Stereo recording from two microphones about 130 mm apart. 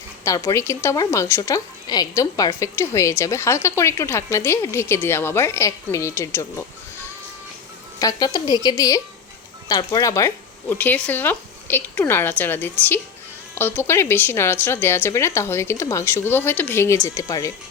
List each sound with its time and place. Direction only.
0.3 s a woman's voice: 25° left (ahead or behind)
7.9 s a woman's voice: 30° left (ahead or behind)